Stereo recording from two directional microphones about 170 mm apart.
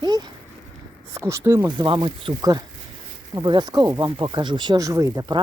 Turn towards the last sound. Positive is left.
turn(degrees=-20)  # may be behind; listen again after turning